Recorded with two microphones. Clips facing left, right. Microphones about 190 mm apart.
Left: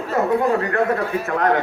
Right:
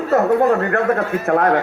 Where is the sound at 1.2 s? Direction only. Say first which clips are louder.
Right 7 dB; 50° right (ahead or behind).